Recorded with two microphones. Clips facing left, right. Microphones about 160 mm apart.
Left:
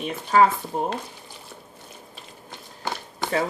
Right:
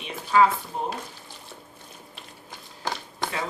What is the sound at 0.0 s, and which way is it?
Speech, 45° left (ahead or behind).